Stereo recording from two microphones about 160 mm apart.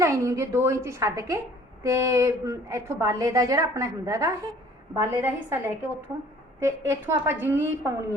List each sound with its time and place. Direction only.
0.0 s a woman's voice: 20° right (ahead or behind)